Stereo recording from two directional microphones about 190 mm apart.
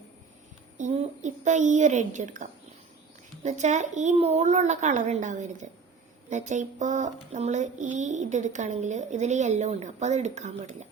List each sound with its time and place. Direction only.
0.8 s speech: 40° right (ahead or behind)